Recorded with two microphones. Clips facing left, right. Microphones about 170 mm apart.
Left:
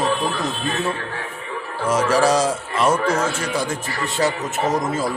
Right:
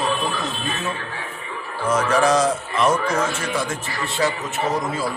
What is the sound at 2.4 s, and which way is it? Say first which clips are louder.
Speech: even; 10° left (ahead or behind).